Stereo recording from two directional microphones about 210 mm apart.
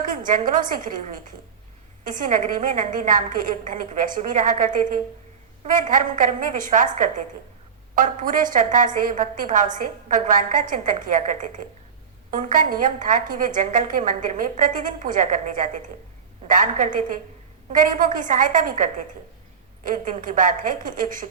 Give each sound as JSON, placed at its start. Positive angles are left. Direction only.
{"t": 0.0, "sound": "a woman's voice", "side_deg": -40}